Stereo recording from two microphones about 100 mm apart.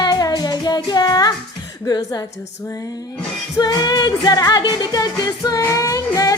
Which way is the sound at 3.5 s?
45° left (ahead or behind).